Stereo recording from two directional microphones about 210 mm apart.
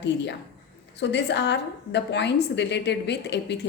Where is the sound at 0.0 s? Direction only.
55° left (ahead or behind).